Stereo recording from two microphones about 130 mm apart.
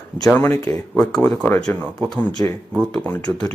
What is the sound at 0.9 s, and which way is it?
Speech, 5° left (ahead or behind).